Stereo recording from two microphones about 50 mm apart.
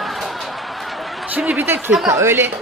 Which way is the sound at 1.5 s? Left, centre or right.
Right.